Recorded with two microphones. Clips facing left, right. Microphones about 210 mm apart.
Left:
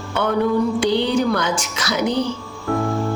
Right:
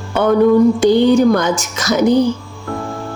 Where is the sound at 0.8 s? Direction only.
45° right (ahead or behind).